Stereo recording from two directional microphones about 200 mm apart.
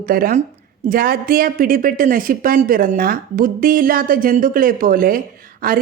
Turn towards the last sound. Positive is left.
turn(degrees=-45)  # may be behind; listen again after turning